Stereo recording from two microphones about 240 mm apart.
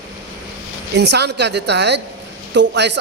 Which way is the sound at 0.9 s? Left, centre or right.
Right.